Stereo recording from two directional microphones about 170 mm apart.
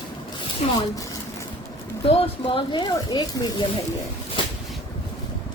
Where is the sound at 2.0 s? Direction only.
35° left (ahead or behind).